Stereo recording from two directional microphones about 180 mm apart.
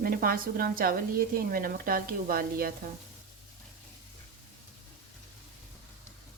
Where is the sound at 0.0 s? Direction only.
55° right (ahead or behind).